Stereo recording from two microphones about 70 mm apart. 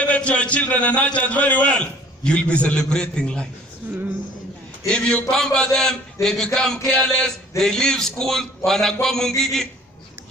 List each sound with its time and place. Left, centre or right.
0.0 s a man's voice: centre
4.8 s a man's voice: centre